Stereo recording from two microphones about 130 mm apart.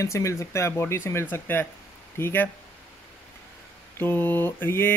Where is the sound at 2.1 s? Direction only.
20° left (ahead or behind).